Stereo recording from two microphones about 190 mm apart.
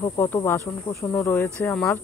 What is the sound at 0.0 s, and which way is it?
Speech, 15° left (ahead or behind).